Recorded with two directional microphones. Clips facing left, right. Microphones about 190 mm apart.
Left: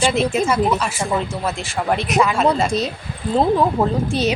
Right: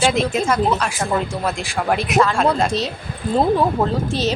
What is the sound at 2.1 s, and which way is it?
Speech, 10° left (ahead or behind).